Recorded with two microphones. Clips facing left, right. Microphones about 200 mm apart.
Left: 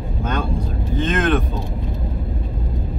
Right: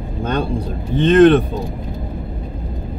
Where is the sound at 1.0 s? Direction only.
35° right (ahead or behind).